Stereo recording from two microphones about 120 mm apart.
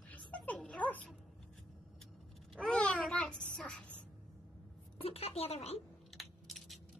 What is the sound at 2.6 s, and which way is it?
A child's voice, 5° left (ahead or behind).